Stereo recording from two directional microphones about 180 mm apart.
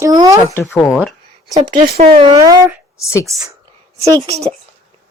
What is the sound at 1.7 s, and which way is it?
Speech, 55° right (ahead or behind).